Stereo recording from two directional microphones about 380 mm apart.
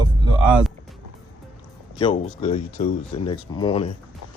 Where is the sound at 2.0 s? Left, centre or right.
Centre.